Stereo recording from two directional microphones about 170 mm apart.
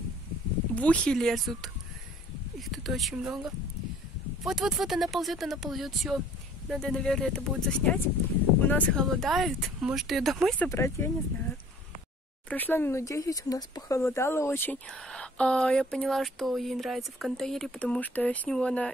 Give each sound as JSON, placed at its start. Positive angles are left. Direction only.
{"t": 0.7, "sound": "speech", "side_deg": 5}
{"t": 2.7, "sound": "speech", "side_deg": 0}
{"t": 10.7, "sound": "speech", "side_deg": 15}
{"t": 12.4, "sound": "speech", "side_deg": 10}